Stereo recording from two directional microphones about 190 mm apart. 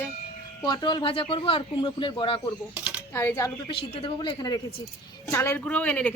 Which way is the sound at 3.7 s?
30° left (ahead or behind).